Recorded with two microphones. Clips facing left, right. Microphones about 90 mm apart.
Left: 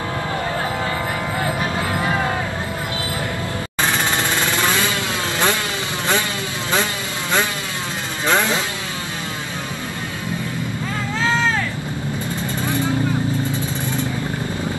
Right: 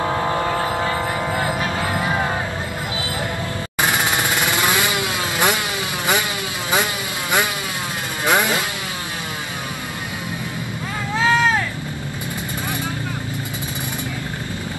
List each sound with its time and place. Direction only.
3.8 s jackhammer: 15° right (ahead or behind)
8.3 s vehicle: 15° right (ahead or behind)
11.1 s a sound: 15° right (ahead or behind)
12.6 s vehicle: 15° right (ahead or behind)